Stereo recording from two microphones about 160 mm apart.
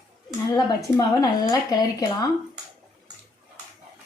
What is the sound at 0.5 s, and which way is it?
A woman's voice, 20° left (ahead or behind).